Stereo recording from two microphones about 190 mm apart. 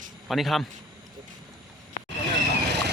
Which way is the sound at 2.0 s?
50° left (ahead or behind).